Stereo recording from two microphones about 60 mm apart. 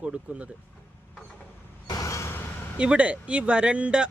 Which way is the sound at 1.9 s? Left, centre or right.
Left.